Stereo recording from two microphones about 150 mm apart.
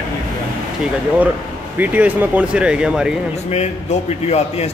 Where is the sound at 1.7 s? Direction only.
10° right (ahead or behind).